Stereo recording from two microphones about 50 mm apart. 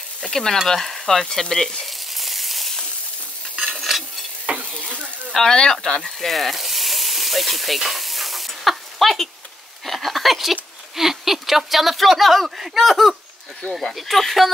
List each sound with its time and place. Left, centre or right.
0.2 s speech: centre
0.7 s frying: centre
3.9 s stir: centre
4.5 s stir: right
5.3 s sizzle: centre
9.8 s speech: centre